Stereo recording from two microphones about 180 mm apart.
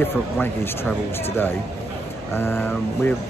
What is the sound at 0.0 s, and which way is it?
Speech, 10° left (ahead or behind).